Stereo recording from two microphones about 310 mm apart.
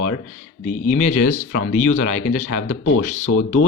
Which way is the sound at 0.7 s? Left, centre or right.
Left.